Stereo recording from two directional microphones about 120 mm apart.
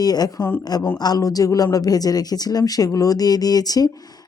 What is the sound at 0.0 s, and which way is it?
Speech, 35° left (ahead or behind).